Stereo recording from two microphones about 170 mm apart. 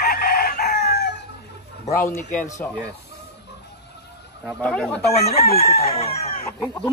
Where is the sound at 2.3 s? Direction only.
45° left (ahead or behind).